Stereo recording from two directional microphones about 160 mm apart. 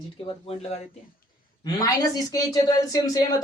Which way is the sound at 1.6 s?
25° left (ahead or behind).